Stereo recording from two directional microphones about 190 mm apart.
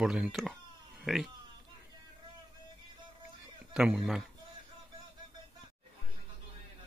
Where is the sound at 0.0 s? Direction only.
5° right (ahead or behind).